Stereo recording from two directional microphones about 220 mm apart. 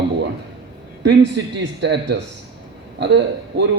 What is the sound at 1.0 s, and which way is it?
A man's voice, 50° right (ahead or behind).